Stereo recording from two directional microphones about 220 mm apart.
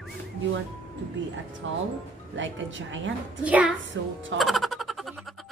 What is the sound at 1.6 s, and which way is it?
A woman's voice, 60° right (ahead or behind).